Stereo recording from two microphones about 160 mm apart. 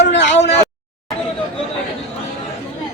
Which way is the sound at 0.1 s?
90° left.